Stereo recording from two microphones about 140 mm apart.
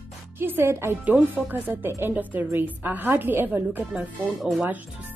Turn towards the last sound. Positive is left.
turn(degrees=-5)  # may be behind; listen again after turning